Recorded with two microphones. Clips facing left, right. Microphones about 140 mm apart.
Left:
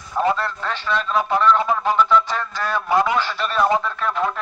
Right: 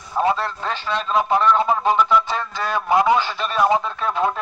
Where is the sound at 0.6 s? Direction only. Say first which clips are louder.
Left 1 dB; 25° right (ahead or behind).